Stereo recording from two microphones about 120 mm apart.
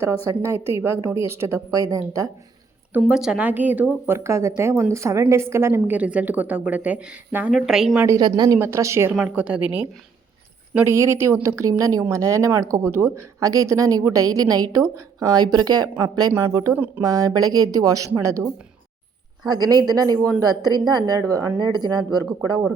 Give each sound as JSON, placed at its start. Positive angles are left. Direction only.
{"t": 0.3, "sound": "a woman's voice", "side_deg": -20}
{"t": 3.1, "sound": "a woman's voice", "side_deg": -5}
{"t": 7.9, "sound": "a woman's voice", "side_deg": -25}
{"t": 8.2, "sound": "speech", "side_deg": -35}
{"t": 8.5, "sound": "a woman's voice", "side_deg": -20}
{"t": 9.1, "sound": "a woman's voice", "side_deg": -10}
{"t": 10.8, "sound": "a woman's voice", "side_deg": -20}
{"t": 16.7, "sound": "a woman's voice", "side_deg": -15}
{"t": 17.0, "sound": "a woman's voice", "side_deg": -30}
{"t": 19.5, "sound": "speech", "side_deg": -35}